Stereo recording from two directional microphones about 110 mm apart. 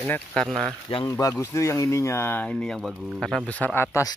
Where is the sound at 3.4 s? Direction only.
15° left (ahead or behind).